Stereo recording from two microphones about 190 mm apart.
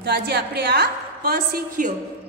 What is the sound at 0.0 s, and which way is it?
A woman's voice, 60° right (ahead or behind).